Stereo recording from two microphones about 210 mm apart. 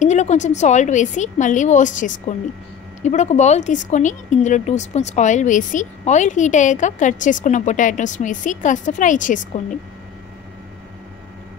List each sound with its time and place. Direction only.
0.0 s speech: 35° left (ahead or behind)